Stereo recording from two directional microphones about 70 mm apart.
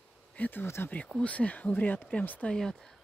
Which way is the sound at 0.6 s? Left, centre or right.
Left.